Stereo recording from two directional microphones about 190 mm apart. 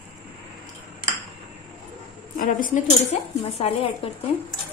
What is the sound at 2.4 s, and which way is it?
Speech, 45° left (ahead or behind).